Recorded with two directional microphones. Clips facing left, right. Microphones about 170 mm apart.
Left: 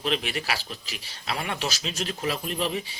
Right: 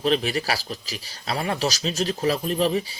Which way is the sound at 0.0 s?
35° right (ahead or behind).